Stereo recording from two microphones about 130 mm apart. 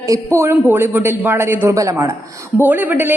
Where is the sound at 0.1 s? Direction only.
20° right (ahead or behind).